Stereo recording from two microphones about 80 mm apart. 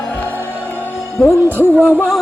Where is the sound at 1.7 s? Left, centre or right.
Centre.